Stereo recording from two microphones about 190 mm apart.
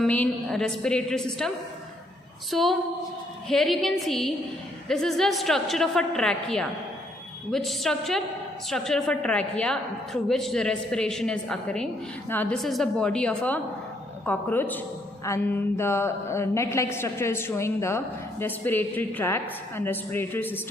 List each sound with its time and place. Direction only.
0.0 s a woman's voice: 5° left (ahead or behind)